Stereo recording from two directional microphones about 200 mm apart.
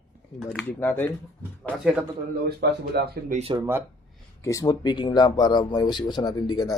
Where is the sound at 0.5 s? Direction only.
10° left (ahead or behind).